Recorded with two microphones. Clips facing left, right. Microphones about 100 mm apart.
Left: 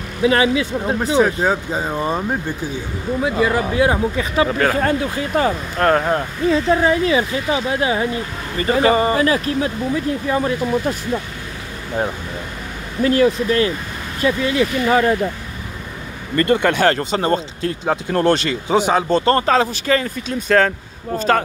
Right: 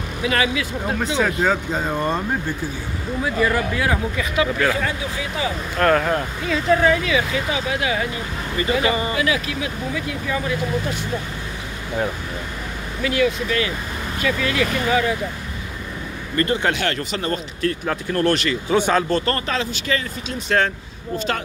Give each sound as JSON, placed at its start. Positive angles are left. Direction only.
{"t": 0.2, "sound": "speech", "side_deg": 30}
{"t": 1.2, "sound": "speech", "side_deg": 15}
{"t": 3.3, "sound": "speech", "side_deg": 20}
{"t": 5.8, "sound": "speech", "side_deg": 30}
{"t": 13.0, "sound": "speech", "side_deg": 35}
{"t": 14.9, "sound": "speech", "side_deg": 40}
{"t": 16.7, "sound": "speech", "side_deg": 35}
{"t": 18.8, "sound": "speech", "side_deg": 15}